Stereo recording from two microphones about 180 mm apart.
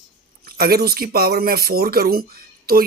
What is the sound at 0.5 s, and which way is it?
Speech, 60° right (ahead or behind).